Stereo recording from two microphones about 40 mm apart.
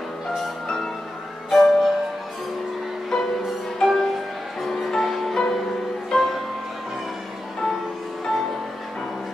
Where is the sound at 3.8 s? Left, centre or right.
Centre.